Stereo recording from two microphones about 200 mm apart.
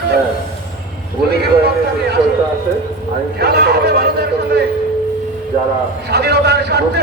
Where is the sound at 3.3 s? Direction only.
55° right (ahead or behind).